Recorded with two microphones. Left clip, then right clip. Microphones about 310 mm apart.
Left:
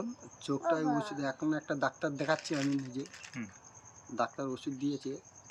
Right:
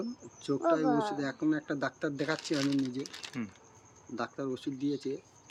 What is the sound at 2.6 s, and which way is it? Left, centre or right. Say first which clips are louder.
Speech: right 3 dB; centre.